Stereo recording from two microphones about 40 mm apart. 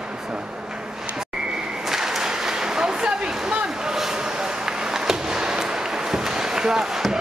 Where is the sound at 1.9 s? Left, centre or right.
Centre.